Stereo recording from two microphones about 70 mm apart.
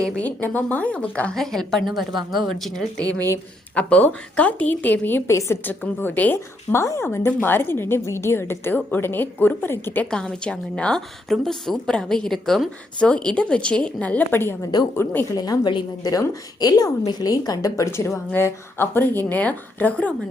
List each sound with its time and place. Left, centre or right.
0.0 s a woman's voice: centre
1.3 s a woman's voice: centre
3.8 s a woman's voice: centre
5.3 s a woman's voice: left
5.6 s a woman's voice: left
10.1 s a woman's voice: centre; by 15.3 s left
15.4 s a woman's voice: left
17.8 s a woman's voice: left
18.3 s a woman's voice: left
19.4 s a woman's voice: centre